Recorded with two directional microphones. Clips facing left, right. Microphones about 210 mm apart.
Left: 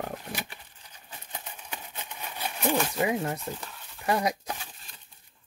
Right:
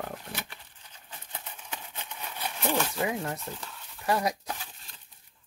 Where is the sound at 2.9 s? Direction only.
20° left (ahead or behind).